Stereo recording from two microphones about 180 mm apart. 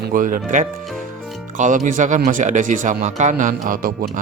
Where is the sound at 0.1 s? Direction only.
50° right (ahead or behind).